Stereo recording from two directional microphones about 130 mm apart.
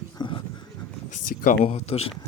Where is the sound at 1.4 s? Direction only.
60° left (ahead or behind).